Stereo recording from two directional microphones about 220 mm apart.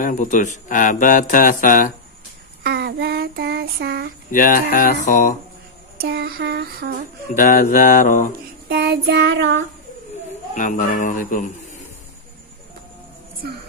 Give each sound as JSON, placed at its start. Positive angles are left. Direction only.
{"t": 0.0, "sound": "speech", "side_deg": 35}
{"t": 2.6, "sound": "child singing", "side_deg": -50}
{"t": 4.3, "sound": "speech", "side_deg": 40}
{"t": 5.9, "sound": "a sound", "side_deg": -45}
{"t": 7.3, "sound": "speech", "side_deg": 35}
{"t": 8.6, "sound": "child singing", "side_deg": -45}
{"t": 10.5, "sound": "speech", "side_deg": 35}